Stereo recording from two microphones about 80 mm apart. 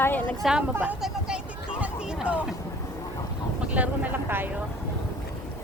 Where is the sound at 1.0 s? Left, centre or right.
Centre.